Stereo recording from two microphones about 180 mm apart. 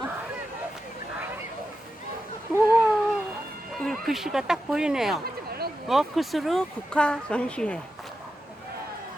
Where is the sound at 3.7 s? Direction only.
Centre (ahead or behind).